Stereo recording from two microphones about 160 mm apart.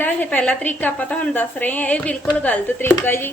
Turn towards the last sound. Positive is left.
turn(degrees=15)  # may be behind; listen again after turning